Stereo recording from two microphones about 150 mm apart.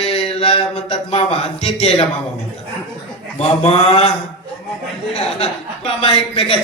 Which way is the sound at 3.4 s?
45° left (ahead or behind).